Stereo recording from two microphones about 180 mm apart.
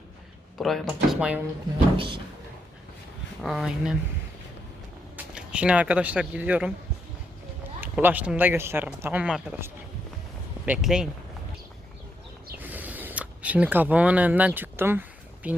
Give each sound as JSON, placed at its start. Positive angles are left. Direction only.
{"t": 0.6, "sound": "speech", "side_deg": 0}
{"t": 2.0, "sound": "music", "side_deg": -30}
{"t": 3.4, "sound": "speech", "side_deg": 0}
{"t": 5.1, "sound": "speech", "side_deg": -5}
{"t": 7.8, "sound": "speech", "side_deg": -10}
{"t": 12.5, "sound": "a sound", "side_deg": -10}
{"t": 15.4, "sound": "speech", "side_deg": -10}